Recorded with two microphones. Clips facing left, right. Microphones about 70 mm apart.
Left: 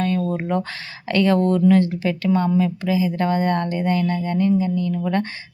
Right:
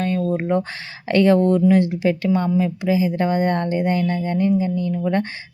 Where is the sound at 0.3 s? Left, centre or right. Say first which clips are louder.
Right 3 dB; centre.